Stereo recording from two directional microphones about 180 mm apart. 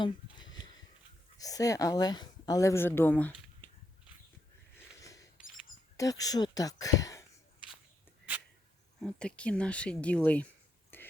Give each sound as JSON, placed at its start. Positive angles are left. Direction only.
{"t": 0.0, "sound": "a sound", "side_deg": 25}
{"t": 1.4, "sound": "speech", "side_deg": 20}
{"t": 4.7, "sound": "sniff", "side_deg": 20}
{"t": 6.0, "sound": "speech", "side_deg": 20}
{"t": 9.0, "sound": "speech", "side_deg": 5}
{"t": 10.9, "sound": "a sound", "side_deg": 10}